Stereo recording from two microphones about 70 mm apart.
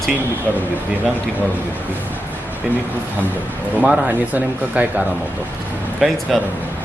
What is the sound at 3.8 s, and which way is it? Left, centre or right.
Speech, centre.